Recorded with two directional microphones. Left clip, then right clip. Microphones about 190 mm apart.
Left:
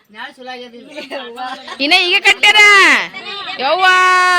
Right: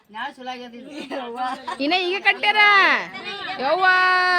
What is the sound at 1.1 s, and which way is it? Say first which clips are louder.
Speech: left 1 dB; 60° right (ahead or behind).